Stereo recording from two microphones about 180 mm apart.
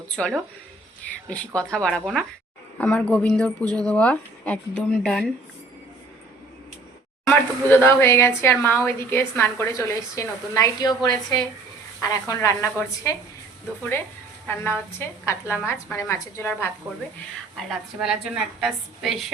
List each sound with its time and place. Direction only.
0.1 s a woman's voice: 5° left (ahead or behind)
7.3 s speech: 10° left (ahead or behind)
14.4 s speech: 10° left (ahead or behind)
17.6 s a woman's voice: centre (ahead or behind)